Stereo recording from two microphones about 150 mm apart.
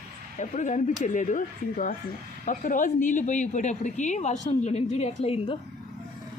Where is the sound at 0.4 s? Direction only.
55° left (ahead or behind).